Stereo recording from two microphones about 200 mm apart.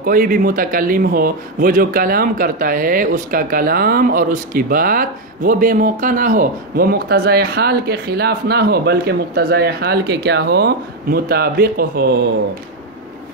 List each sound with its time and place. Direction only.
0.0 s speech: 45° right (ahead or behind)